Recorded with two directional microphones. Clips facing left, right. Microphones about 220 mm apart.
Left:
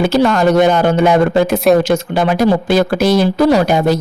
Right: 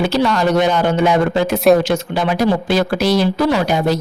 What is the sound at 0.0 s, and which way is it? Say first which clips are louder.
Speech: left 4 dB; 50° left (ahead or behind).